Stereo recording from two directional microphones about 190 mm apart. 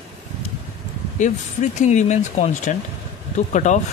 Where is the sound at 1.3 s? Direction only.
35° left (ahead or behind).